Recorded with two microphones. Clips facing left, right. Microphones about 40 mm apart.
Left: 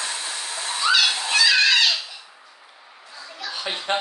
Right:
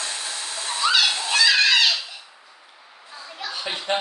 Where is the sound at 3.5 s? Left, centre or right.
Centre.